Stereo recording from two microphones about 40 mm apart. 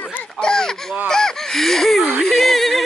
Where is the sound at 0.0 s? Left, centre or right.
Left.